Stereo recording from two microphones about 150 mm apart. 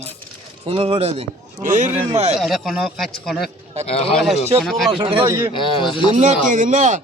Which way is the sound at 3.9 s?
40° left (ahead or behind).